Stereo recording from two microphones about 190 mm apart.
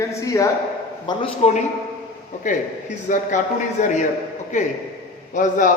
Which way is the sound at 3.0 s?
40° left (ahead or behind).